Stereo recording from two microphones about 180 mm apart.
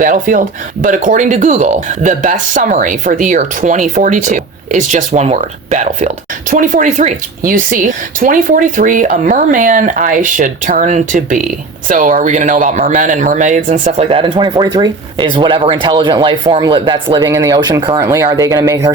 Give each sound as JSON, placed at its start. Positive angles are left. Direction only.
{"t": 0.0, "sound": "speech", "side_deg": -50}